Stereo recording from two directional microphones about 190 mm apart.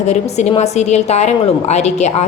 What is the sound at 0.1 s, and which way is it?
A woman's voice, 35° left (ahead or behind).